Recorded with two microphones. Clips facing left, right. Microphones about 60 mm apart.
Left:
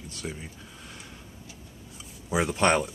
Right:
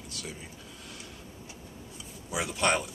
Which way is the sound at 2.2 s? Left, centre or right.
Left.